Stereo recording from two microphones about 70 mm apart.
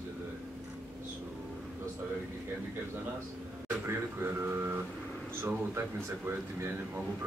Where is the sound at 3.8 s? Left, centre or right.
Right.